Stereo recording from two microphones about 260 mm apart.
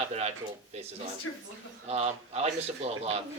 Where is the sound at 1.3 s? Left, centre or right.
Left.